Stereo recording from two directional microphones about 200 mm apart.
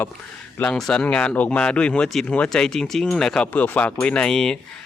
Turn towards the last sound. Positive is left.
turn(degrees=5)  # may be behind; listen again after turning